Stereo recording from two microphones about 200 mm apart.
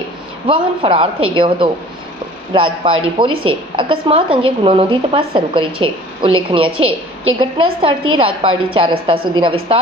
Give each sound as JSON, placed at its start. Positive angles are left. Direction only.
{"t": 0.4, "sound": "a woman's voice", "side_deg": -25}